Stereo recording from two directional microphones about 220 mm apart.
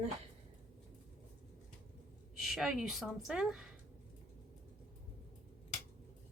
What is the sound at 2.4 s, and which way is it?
A woman's voice, centre (ahead or behind).